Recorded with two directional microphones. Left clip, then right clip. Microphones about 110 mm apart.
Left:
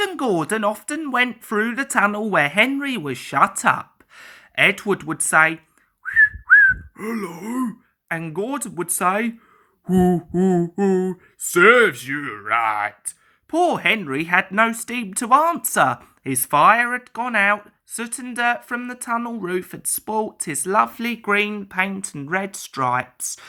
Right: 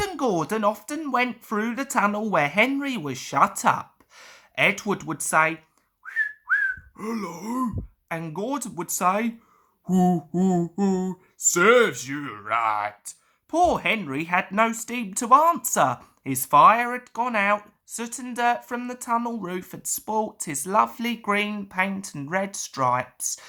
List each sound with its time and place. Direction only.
0.0 s speech: 15° left (ahead or behind)
6.1 s whistling: 25° left (ahead or behind)
9.8 s speech: 20° left (ahead or behind)